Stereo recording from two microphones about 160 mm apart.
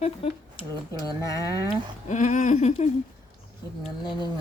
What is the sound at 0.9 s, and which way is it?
Speech, 20° left (ahead or behind).